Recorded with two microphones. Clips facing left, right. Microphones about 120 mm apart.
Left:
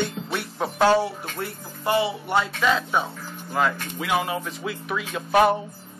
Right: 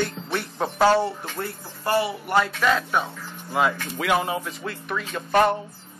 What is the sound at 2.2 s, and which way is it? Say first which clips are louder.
Speech: right 1 dB; centre (ahead or behind).